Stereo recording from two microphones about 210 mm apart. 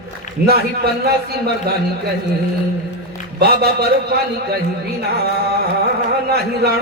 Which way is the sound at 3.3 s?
50° right (ahead or behind).